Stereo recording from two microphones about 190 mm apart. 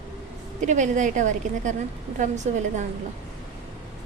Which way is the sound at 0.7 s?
40° right (ahead or behind).